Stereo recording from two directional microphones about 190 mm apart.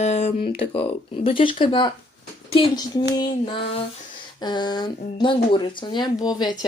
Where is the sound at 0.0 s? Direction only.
35° left (ahead or behind).